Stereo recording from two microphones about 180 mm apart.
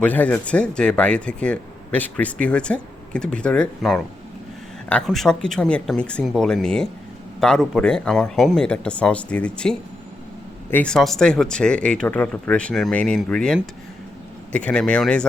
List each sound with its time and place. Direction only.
0.0 s speech: 10° left (ahead or behind)